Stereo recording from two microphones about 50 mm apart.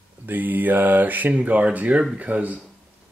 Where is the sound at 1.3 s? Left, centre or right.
Right.